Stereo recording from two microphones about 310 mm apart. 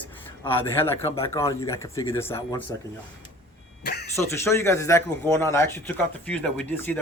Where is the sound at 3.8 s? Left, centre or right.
Left.